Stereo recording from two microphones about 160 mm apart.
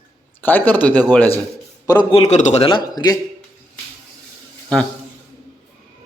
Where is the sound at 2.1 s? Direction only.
45° left (ahead or behind).